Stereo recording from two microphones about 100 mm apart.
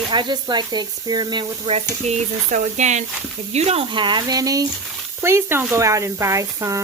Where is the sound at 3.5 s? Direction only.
90° right.